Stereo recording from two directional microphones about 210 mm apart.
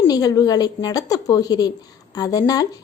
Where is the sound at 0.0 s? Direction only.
20° left (ahead or behind).